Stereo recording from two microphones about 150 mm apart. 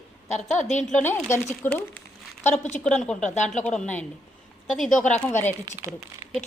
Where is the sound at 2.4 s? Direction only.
50° left (ahead or behind).